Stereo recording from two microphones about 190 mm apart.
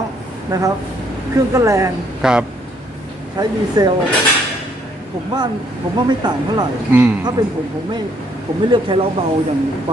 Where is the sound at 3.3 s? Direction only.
20° right (ahead or behind).